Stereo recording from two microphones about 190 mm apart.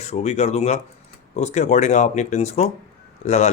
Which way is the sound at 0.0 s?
35° left (ahead or behind).